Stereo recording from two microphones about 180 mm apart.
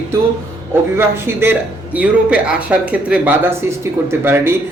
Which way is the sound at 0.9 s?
15° right (ahead or behind).